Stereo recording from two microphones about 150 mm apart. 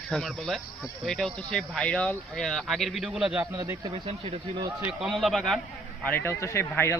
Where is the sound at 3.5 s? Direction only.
20° right (ahead or behind).